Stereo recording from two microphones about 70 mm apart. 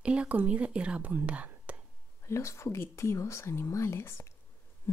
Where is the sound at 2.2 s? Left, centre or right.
Left.